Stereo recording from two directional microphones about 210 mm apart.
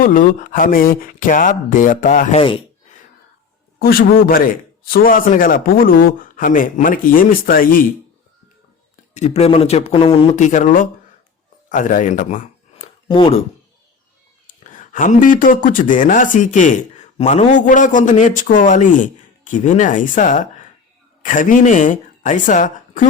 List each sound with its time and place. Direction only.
0.0 s speech: 40° left (ahead or behind)
3.8 s speech: 45° left (ahead or behind)
9.1 s speech: 30° left (ahead or behind)
13.1 s speech: 25° left (ahead or behind)
14.4 s speech: 40° left (ahead or behind)